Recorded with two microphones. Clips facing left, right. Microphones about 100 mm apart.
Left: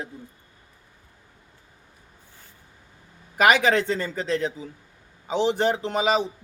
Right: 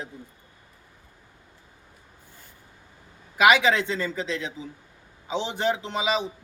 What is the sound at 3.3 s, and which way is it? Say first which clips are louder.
A man's voice: even; 45° left (ahead or behind).